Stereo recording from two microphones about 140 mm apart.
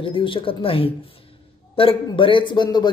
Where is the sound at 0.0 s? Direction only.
40° left (ahead or behind).